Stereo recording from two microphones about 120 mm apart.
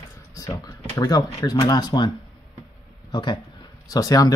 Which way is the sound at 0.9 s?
35° left (ahead or behind).